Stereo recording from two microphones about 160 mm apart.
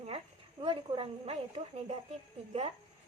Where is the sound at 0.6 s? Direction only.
35° right (ahead or behind).